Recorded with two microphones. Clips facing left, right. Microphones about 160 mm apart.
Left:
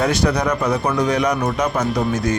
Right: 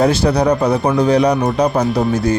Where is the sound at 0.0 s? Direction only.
30° right (ahead or behind).